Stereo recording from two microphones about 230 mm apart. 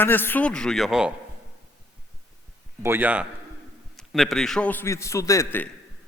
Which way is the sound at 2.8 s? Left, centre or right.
Centre.